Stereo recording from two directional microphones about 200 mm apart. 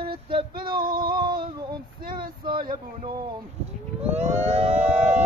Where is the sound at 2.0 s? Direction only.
50° right (ahead or behind).